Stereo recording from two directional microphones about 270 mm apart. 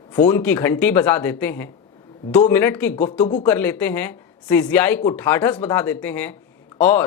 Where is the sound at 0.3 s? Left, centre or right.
Centre.